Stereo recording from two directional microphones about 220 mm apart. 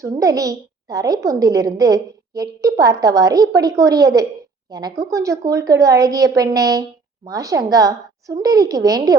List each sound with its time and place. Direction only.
0.0 s a woman's voice: 15° right (ahead or behind)